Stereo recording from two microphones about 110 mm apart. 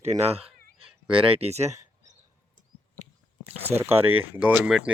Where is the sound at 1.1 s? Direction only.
55° right (ahead or behind); by 1.7 s 80° right.